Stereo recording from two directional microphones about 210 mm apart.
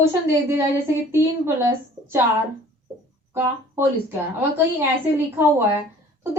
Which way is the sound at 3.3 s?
10° right (ahead or behind).